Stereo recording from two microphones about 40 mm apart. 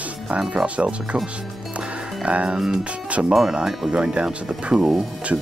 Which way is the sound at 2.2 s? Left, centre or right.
Right.